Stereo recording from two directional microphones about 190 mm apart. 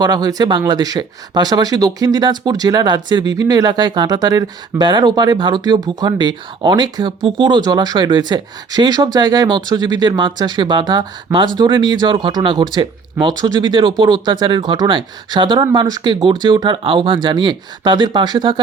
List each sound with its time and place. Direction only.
0.0 s speech: 20° right (ahead or behind)